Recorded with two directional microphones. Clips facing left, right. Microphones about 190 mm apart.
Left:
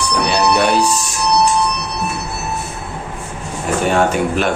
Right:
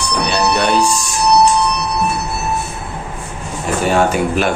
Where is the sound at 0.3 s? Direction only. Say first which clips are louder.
Left 1 dB; 5° left (ahead or behind).